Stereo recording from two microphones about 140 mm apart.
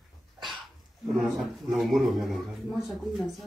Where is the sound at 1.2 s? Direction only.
Centre (ahead or behind).